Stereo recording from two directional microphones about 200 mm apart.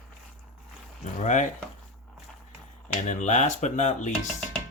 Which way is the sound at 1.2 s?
40° left (ahead or behind).